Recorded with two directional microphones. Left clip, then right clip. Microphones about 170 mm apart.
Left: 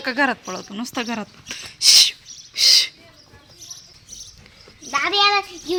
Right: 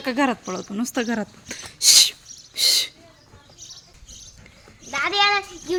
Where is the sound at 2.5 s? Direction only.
15° right (ahead or behind).